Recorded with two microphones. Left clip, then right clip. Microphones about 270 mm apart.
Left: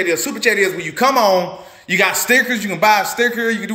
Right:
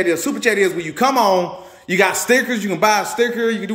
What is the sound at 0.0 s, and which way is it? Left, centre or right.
A man's voice, centre.